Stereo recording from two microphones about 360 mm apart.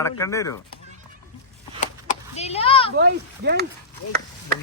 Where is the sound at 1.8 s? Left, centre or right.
Centre.